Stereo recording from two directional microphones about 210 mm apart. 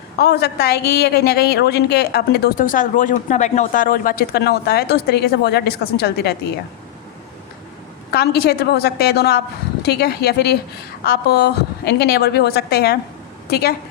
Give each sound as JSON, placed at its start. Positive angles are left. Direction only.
{"t": 0.2, "sound": "a woman's voice", "side_deg": 50}
{"t": 8.1, "sound": "a woman's voice", "side_deg": 50}